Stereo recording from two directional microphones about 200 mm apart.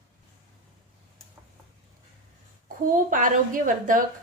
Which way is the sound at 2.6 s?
40° right (ahead or behind).